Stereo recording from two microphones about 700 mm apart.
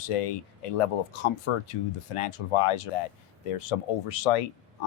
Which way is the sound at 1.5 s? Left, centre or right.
Left.